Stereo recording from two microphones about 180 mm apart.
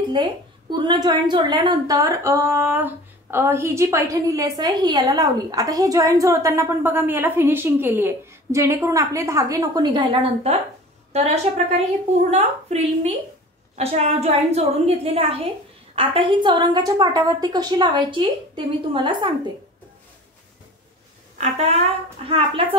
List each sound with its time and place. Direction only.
0.1 s a woman's voice: 25° right (ahead or behind)
21.4 s a woman's voice: 35° right (ahead or behind)